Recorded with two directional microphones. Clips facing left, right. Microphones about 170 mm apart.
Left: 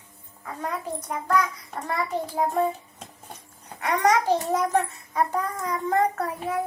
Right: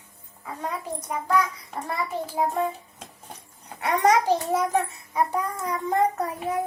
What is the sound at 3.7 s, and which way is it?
A child's voice, 15° right (ahead or behind).